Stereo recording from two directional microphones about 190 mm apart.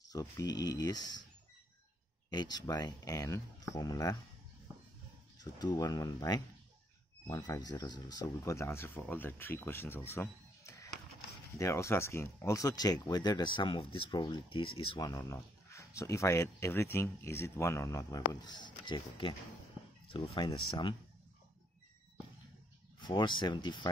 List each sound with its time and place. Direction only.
0.1 s speech: 20° left (ahead or behind)
2.2 s speech: 20° left (ahead or behind)
5.4 s speech: 20° left (ahead or behind)
22.9 s speech: 25° left (ahead or behind)